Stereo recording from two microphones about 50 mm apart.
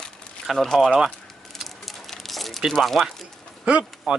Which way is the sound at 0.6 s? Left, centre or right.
Centre.